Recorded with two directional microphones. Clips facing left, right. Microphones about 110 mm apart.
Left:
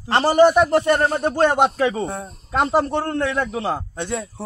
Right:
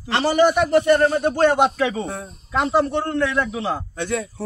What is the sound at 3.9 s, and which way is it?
Speech, 30° left (ahead or behind).